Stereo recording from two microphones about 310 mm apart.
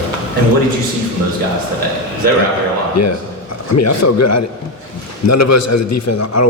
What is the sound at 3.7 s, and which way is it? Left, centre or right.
A man's voice, left.